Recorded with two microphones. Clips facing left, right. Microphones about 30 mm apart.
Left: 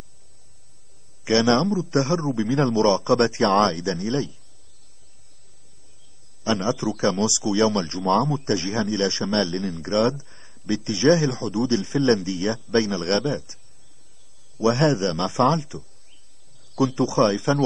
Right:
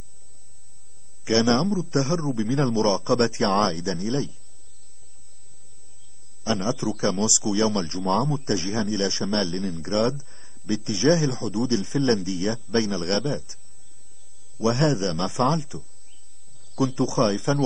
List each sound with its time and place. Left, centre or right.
1.2 s a man's voice: centre
3.4 s speech: left
3.7 s a man's voice: centre
6.4 s a man's voice: centre
14.6 s a man's voice: centre